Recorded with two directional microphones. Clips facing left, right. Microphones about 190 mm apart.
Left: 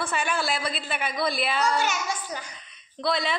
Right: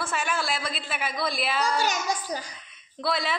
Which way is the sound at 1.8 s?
40° right (ahead or behind).